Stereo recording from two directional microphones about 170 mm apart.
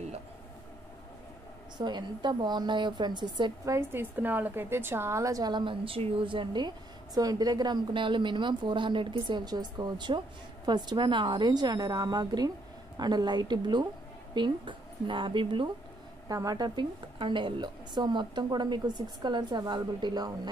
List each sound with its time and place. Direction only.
1.8 s a woman's voice: 25° right (ahead or behind)